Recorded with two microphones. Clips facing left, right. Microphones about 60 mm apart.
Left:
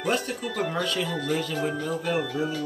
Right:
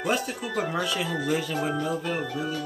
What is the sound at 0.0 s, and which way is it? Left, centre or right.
Speech, centre.